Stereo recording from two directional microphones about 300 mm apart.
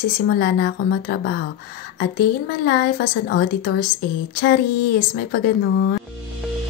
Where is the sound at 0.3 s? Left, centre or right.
Left.